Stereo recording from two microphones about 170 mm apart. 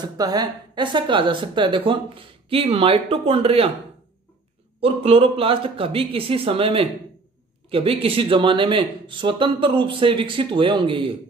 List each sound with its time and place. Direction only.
0.0 s a woman's voice: 25° right (ahead or behind)
4.7 s a woman's voice: 35° right (ahead or behind)